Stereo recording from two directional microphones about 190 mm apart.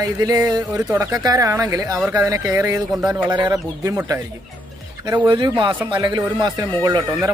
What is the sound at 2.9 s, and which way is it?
Speech, 5° right (ahead or behind).